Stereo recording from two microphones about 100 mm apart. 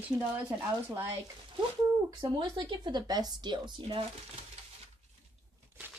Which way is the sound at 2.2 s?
50° right (ahead or behind).